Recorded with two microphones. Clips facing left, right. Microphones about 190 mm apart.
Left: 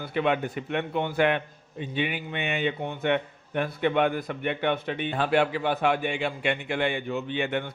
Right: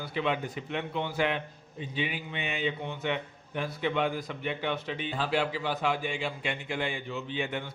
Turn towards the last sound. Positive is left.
turn(degrees=65)  # may be behind; listen again after turning